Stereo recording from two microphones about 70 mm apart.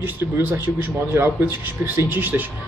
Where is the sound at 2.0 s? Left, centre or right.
Right.